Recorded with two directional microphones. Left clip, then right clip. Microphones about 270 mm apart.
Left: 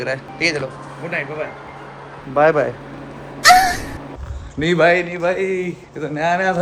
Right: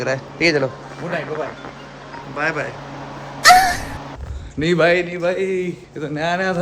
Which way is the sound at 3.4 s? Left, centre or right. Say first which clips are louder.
Even; centre.